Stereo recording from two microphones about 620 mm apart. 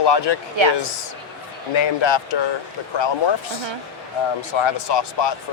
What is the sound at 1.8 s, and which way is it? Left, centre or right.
Speech, left.